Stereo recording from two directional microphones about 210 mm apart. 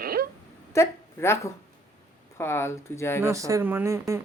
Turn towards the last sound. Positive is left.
turn(degrees=-15)  # may be behind; listen again after turning